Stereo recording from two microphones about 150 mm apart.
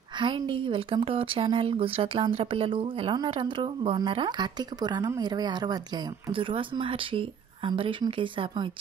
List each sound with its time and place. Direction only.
0.2 s a woman's voice: 35° right (ahead or behind)